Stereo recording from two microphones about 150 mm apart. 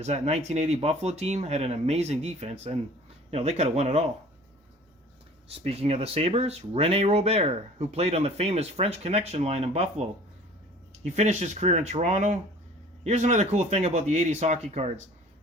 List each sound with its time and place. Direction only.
0.0 s speech: 50° right (ahead or behind)
5.5 s speech: 40° right (ahead or behind)